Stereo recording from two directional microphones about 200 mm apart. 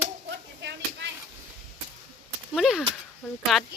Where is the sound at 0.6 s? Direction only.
60° right (ahead or behind).